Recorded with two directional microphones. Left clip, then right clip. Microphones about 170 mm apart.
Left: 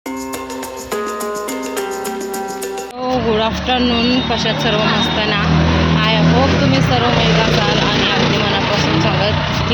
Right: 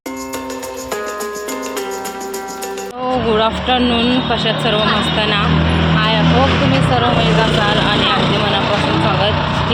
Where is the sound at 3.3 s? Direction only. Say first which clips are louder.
Right 3 dB; 5° left (ahead or behind).